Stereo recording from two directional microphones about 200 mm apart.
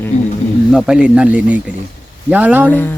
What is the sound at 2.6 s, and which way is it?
Speech, 10° left (ahead or behind).